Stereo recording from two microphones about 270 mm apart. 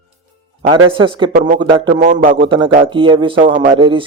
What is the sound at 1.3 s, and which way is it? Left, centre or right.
Speech, right.